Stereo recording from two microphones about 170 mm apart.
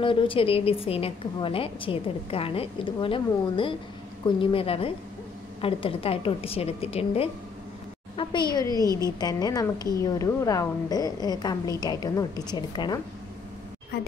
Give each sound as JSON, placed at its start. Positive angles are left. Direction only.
{"t": 0.0, "sound": "a woman's voice", "side_deg": 30}
{"t": 13.9, "sound": "a woman's voice", "side_deg": 70}